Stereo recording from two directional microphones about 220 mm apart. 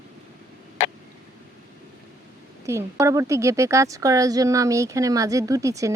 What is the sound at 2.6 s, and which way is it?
Speech, 15° right (ahead or behind).